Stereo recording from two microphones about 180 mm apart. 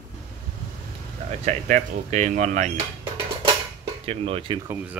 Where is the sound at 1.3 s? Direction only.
40° right (ahead or behind).